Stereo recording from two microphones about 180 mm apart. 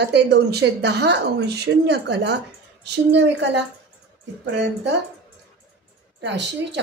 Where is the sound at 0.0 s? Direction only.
65° right (ahead or behind).